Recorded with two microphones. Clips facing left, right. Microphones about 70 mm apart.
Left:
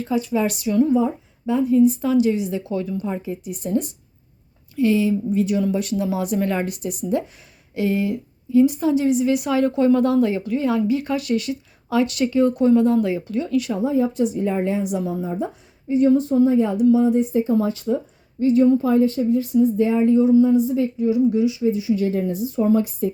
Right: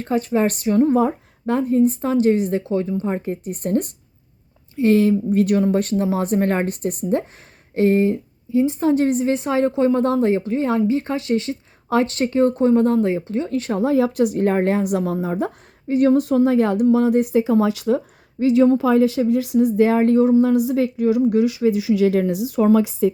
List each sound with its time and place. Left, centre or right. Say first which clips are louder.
0.0 s a woman's voice: right 2 dB; right
0.9 s a woman's voice: right 2 dB; right
2.6 s a woman's voice: right 3 dB; right
3.2 s a woman's voice: right 3 dB; right
5.7 s a woman's voice: right 3 dB; right
8.5 s a woman's voice: left 3 dB; right
8.8 s a woman's voice: right 1 dB; right
13.7 s speech: right 6 dB; right
20.4 s a woman's voice: even; right